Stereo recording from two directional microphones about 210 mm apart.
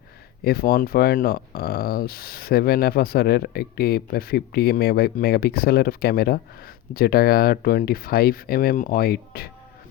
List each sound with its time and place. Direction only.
0.4 s speech: 45° left (ahead or behind)